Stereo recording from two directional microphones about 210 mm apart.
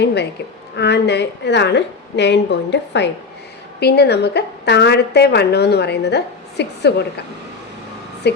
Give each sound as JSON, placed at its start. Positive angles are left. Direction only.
{"t": 0.0, "sound": "a woman's voice", "side_deg": 55}